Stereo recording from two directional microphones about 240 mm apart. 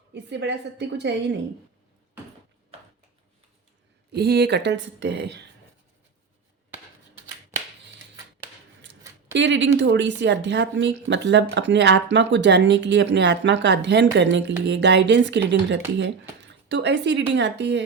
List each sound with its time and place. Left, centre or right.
0.1 s speech: right
4.1 s speech: right
9.3 s speech: right